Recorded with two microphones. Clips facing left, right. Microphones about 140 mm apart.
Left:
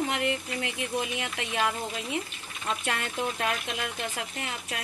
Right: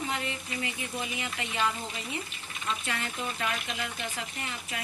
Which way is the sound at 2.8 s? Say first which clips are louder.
Left 4 dB; 65° left (ahead or behind).